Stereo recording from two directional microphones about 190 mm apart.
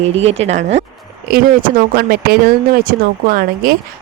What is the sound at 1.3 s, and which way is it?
Speech, 45° right (ahead or behind).